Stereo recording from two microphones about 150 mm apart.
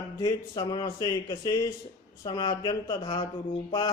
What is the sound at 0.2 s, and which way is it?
Speech, 20° left (ahead or behind).